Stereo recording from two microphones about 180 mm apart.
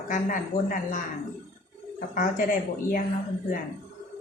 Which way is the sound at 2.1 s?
50° left (ahead or behind).